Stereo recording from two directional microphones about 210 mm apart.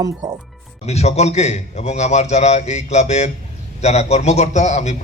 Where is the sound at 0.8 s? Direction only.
30° left (ahead or behind).